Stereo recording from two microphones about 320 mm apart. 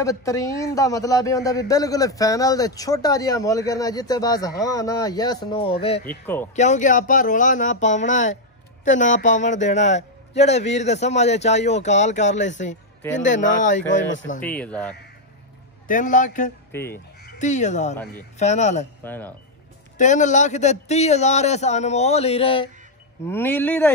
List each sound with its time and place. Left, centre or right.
0.0 s a man's voice: centre
6.0 s speech: centre
6.5 s speech: left
14.4 s speech: centre
15.9 s speech: left
16.7 s a man's voice: centre
17.2 s speech: left
19.0 s speech: centre
20.0 s speech: left; by 23.9 s centre